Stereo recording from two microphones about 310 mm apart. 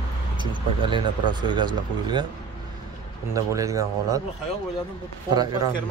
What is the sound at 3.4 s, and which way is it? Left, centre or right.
Speech, centre.